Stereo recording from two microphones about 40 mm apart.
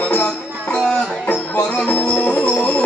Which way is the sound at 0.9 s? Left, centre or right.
Left.